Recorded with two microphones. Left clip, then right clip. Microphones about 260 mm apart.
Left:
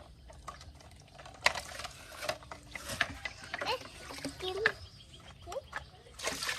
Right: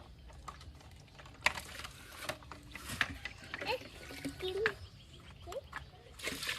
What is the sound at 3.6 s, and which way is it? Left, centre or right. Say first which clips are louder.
Boat: left 2 dB; centre.